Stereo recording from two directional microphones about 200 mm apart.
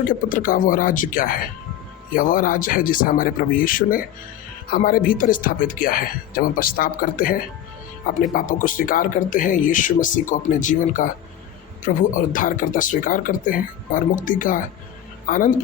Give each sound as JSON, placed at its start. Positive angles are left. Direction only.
{"t": 0.0, "sound": "speech", "side_deg": 45}